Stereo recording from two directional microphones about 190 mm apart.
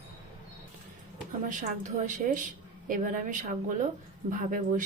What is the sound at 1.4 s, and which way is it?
A woman's voice, 40° right (ahead or behind).